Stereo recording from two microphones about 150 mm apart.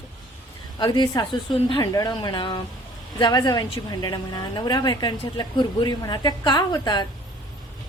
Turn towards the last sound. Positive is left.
turn(degrees=30)  # may be behind; listen again after turning